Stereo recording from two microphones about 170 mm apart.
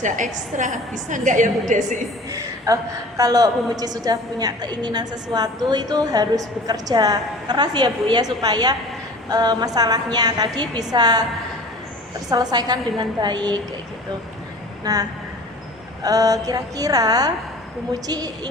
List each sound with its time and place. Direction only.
0.0 s a woman's voice: 45° right (ahead or behind)
2.7 s a woman's voice: 20° right (ahead or behind)
12.3 s a woman's voice: 25° right (ahead or behind)
14.9 s a woman's voice: 20° right (ahead or behind)
16.0 s a woman's voice: 20° right (ahead or behind)